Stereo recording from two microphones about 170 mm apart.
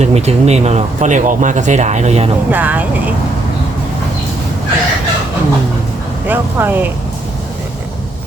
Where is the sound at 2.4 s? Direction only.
10° right (ahead or behind).